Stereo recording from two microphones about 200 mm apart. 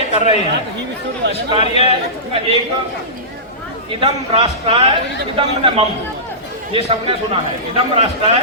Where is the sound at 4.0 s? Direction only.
25° right (ahead or behind).